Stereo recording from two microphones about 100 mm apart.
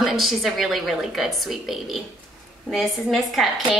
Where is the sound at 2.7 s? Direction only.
Centre (ahead or behind).